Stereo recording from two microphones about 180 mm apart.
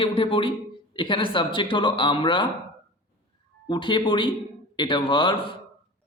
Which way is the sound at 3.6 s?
25° left (ahead or behind).